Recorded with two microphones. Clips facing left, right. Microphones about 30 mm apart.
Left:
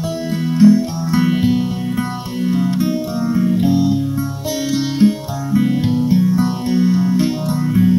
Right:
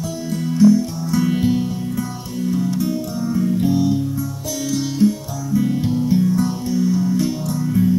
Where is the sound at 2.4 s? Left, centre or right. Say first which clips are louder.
Left 3 dB; left.